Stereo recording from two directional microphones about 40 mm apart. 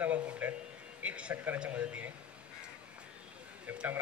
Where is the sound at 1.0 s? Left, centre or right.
Right.